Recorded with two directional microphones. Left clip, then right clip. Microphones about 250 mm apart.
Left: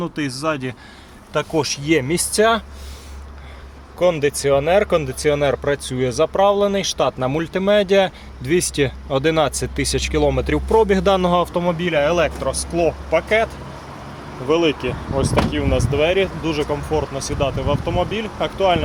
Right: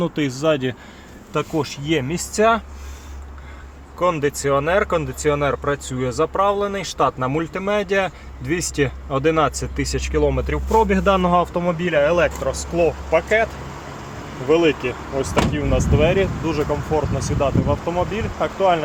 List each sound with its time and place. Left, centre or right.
0.0 s speech: centre
1.3 s speech: centre
4.0 s speech: centre